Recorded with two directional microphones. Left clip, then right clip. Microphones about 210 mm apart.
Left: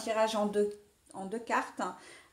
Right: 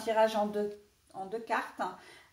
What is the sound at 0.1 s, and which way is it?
Speech, 45° left (ahead or behind).